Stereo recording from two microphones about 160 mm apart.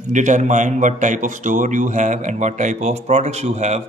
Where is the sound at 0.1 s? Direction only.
50° right (ahead or behind).